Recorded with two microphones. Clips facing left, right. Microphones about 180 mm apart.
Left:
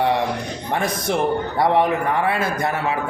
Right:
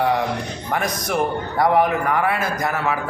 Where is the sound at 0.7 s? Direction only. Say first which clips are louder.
Left 1 dB; 25° left (ahead or behind).